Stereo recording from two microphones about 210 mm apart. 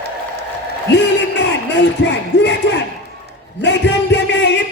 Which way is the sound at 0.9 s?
55° left (ahead or behind).